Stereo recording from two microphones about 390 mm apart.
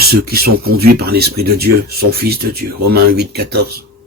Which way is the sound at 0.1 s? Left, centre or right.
Right.